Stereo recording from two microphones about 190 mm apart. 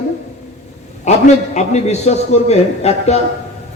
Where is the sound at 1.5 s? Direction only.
35° left (ahead or behind).